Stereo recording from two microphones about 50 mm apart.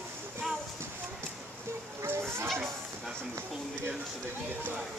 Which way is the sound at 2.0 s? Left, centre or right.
Right.